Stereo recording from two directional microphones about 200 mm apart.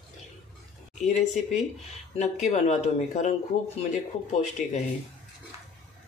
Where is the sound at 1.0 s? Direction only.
35° left (ahead or behind).